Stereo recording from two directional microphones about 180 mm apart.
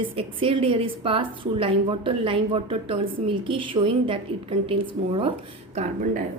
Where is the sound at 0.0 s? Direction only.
30° right (ahead or behind).